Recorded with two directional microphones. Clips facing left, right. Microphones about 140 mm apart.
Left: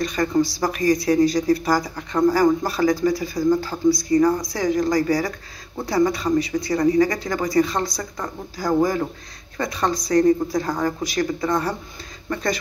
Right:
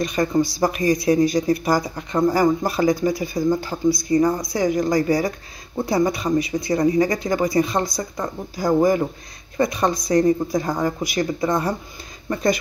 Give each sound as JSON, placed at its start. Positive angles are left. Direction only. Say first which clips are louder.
{"t": 0.0, "sound": "speech", "louder": "right 1 dB", "side_deg": -15}
{"t": 4.6, "sound": "speech", "louder": "left 1 dB", "side_deg": -10}
{"t": 4.9, "sound": "speech", "louder": "right 1 dB", "side_deg": -25}